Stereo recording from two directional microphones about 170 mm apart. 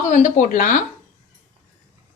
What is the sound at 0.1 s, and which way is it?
Speech, 50° left (ahead or behind).